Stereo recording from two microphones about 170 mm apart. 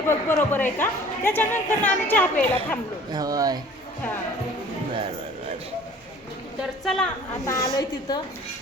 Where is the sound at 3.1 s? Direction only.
20° right (ahead or behind).